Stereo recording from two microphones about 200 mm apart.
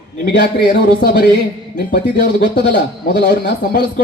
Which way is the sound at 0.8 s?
55° left (ahead or behind).